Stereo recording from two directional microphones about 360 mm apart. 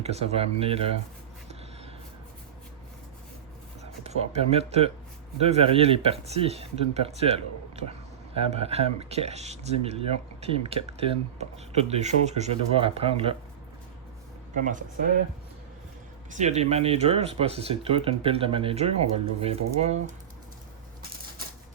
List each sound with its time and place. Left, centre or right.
0.0 s speech: centre
4.0 s speech: centre
14.5 s speech: right
16.3 s speech: centre